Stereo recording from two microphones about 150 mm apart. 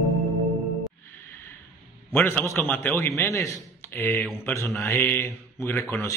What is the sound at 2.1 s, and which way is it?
A man's voice, 15° left (ahead or behind).